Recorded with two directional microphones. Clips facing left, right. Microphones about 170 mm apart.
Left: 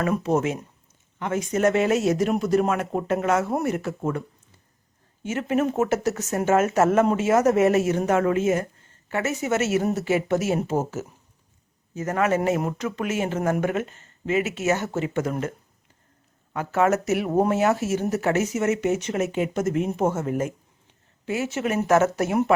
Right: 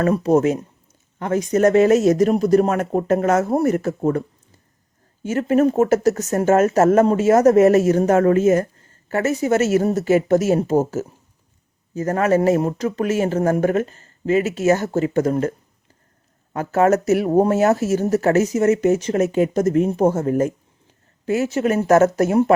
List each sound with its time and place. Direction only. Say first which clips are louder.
0.0 s speech: right 6 dB; 40° right (ahead or behind)
5.2 s speech: right 7 dB; 40° right (ahead or behind)